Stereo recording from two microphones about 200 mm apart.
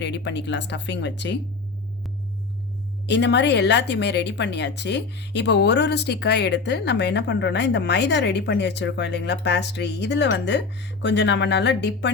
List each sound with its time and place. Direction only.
0.0 s a woman's voice: 60° left (ahead or behind)
3.1 s a woman's voice: 60° left (ahead or behind)